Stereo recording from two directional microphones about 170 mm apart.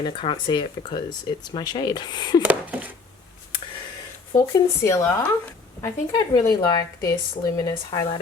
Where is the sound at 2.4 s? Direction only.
10° right (ahead or behind).